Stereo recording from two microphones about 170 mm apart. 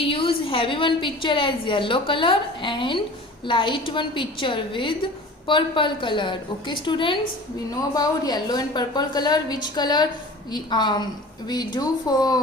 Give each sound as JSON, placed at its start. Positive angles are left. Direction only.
{"t": 0.0, "sound": "a woman's voice", "side_deg": 30}